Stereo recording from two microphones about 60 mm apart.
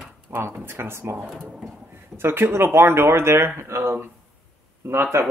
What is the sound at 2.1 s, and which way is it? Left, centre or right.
Speech, right.